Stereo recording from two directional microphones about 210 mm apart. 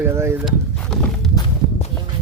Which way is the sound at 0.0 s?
10° right (ahead or behind).